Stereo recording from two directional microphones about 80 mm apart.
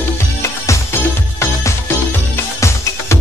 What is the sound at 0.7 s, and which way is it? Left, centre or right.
Music, left.